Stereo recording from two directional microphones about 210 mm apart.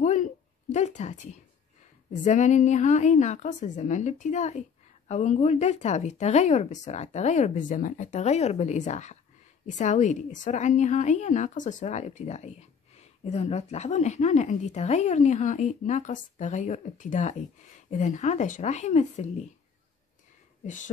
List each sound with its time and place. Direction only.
0.0 s a sound: 35° left (ahead or behind)
2.2 s speech: 35° left (ahead or behind)
20.6 s speech: 35° left (ahead or behind)